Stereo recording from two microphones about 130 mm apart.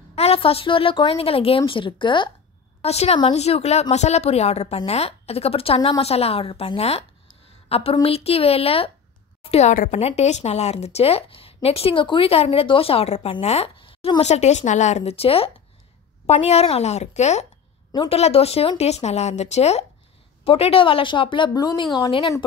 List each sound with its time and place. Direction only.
0.1 s a woman's voice: 50° left (ahead or behind)
2.8 s speech: 55° left (ahead or behind)
14.2 s speech: 60° left (ahead or behind)
17.9 s a woman's voice: 45° left (ahead or behind)